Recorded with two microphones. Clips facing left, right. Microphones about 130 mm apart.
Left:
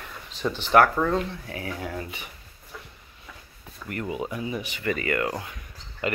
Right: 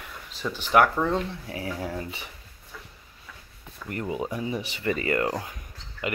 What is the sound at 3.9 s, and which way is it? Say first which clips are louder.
Speech: right 1 dB; 30° right (ahead or behind).